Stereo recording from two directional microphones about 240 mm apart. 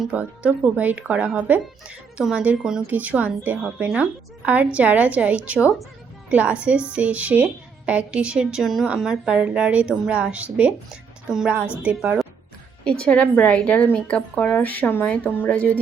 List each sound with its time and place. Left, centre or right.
0.0 s speech: centre